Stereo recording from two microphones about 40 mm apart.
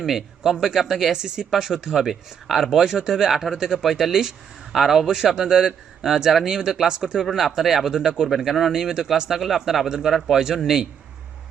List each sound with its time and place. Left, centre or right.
0.0 s speech: centre
1.1 s speech: centre
3.8 s speech: centre
4.8 s speech: centre
5.0 s speech: centre
9.3 s speech: centre